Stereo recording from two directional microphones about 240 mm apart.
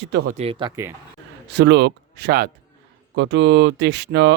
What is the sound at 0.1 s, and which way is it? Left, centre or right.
Speech, right.